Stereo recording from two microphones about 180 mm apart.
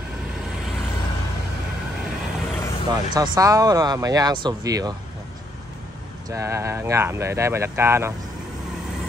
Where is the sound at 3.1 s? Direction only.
20° right (ahead or behind).